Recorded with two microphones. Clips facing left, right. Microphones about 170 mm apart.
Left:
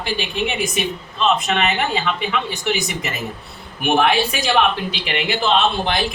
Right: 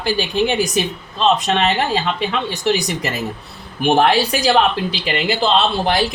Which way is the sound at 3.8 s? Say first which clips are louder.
Right 3 dB; 35° right (ahead or behind).